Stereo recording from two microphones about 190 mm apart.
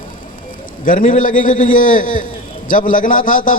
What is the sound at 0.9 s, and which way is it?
A man's voice, 45° left (ahead or behind).